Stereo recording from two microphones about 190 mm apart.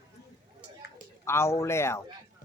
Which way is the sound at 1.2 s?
15° left (ahead or behind).